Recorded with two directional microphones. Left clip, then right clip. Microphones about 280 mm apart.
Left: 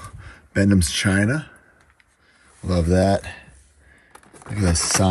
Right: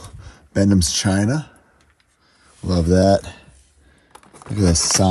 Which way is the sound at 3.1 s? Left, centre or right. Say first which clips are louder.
Right 5 dB; centre.